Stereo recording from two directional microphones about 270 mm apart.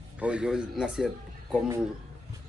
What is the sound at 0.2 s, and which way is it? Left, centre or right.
A man's voice, centre.